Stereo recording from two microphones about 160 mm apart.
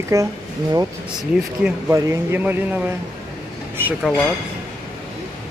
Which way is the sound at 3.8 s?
15° right (ahead or behind).